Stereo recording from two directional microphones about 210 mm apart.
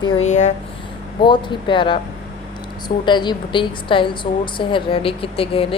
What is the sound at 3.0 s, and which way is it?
A woman's voice, 20° left (ahead or behind).